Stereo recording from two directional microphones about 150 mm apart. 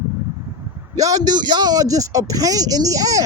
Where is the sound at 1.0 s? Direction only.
25° right (ahead or behind).